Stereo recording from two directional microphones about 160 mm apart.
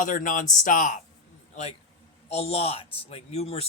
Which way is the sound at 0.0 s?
55° left (ahead or behind).